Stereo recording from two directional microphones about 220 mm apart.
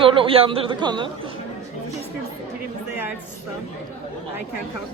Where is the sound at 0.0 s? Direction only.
25° right (ahead or behind).